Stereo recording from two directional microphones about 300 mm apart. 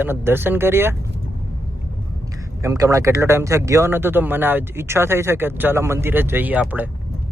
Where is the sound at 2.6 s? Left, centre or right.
Centre.